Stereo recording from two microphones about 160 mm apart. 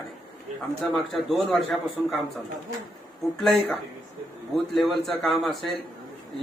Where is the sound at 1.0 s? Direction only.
Centre (ahead or behind).